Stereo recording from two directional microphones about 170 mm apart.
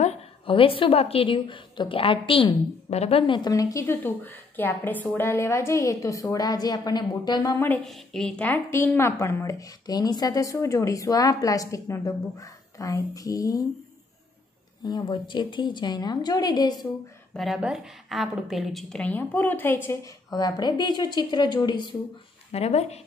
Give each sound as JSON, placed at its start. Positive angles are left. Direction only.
{"t": 0.0, "sound": "a woman's voice", "side_deg": 35}
{"t": 7.5, "sound": "a woman's voice", "side_deg": 10}
{"t": 14.9, "sound": "a woman's voice", "side_deg": 25}
{"t": 17.3, "sound": "a woman's voice", "side_deg": 0}
{"t": 22.5, "sound": "speech", "side_deg": 40}